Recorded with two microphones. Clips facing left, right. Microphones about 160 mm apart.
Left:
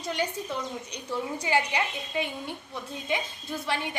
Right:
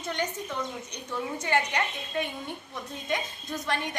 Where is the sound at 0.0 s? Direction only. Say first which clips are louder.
Left 1 dB; 10° left (ahead or behind).